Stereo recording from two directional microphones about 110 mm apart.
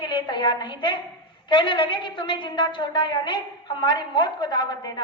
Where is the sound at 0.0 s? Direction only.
45° left (ahead or behind).